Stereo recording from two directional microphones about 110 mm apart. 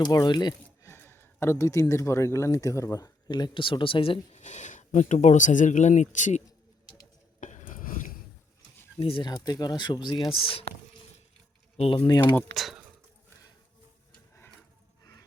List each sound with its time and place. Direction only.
0.0 s speech: 40° left (ahead or behind)
0.8 s speech: 25° left (ahead or behind); by 6.4 s 90° left
9.0 s speech: 60° left (ahead or behind)
9.5 s speech: 40° left (ahead or behind)
10.4 s speech: 60° left (ahead or behind)
11.8 s speech: 55° left (ahead or behind)
12.0 s speech: 40° left (ahead or behind)
12.5 s speech: centre (ahead or behind)
15.0 s a sound: 35° left (ahead or behind)